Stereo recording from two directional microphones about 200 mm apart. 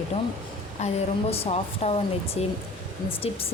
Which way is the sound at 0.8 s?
35° left (ahead or behind).